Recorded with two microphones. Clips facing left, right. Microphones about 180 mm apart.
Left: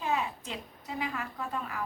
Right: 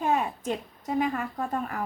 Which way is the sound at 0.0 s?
50° right (ahead or behind).